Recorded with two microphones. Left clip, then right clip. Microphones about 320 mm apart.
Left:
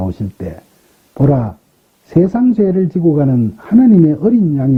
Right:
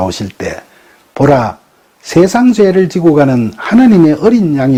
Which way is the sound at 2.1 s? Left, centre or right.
Centre.